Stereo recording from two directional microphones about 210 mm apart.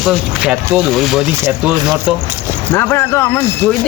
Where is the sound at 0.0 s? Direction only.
5° right (ahead or behind).